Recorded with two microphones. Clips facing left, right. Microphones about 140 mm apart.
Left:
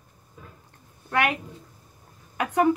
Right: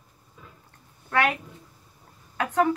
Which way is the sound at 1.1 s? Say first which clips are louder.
Even; 15° left (ahead or behind).